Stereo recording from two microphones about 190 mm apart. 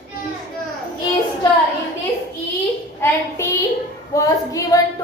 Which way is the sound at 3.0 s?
15° left (ahead or behind).